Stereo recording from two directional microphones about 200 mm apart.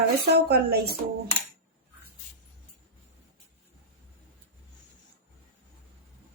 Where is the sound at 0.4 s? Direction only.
55° right (ahead or behind).